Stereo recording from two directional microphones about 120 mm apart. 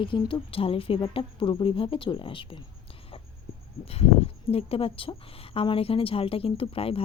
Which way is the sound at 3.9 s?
55° left (ahead or behind).